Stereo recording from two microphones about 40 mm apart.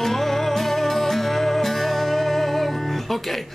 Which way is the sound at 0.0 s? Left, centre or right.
Centre.